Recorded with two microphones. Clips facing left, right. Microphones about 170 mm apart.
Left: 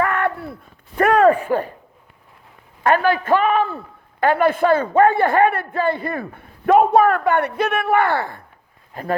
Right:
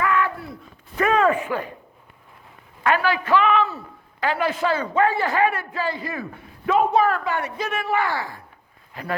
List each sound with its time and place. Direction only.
0.0 s a sound: 60° left (ahead or behind)
1.3 s speech: 35° left (ahead or behind)
2.8 s a man's voice: 50° left (ahead or behind)
8.9 s speech: 45° left (ahead or behind)